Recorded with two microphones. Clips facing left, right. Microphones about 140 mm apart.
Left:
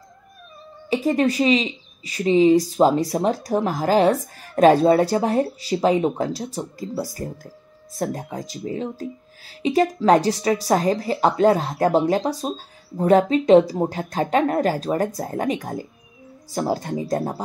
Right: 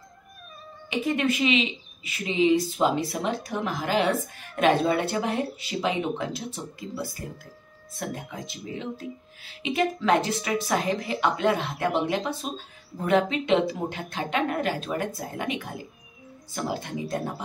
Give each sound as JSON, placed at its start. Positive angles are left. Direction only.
{"t": 0.8, "sound": "speech", "side_deg": 35}